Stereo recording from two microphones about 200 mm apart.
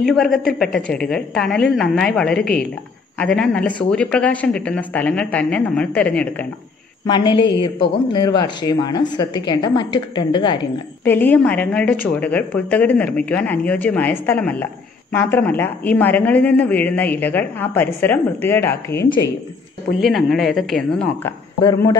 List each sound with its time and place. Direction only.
0.0 s a woman's voice: centre (ahead or behind)
7.1 s speech: 20° left (ahead or behind)
11.1 s speech: 10° left (ahead or behind)
20.0 s a woman's voice: centre (ahead or behind)
21.5 s speech: 20° left (ahead or behind)